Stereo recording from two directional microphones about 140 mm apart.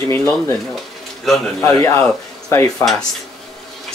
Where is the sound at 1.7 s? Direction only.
20° left (ahead or behind).